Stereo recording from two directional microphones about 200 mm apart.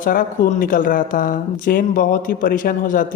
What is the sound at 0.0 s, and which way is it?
Speech, 45° left (ahead or behind).